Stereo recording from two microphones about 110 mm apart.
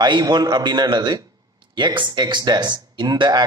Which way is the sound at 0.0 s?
40° right (ahead or behind).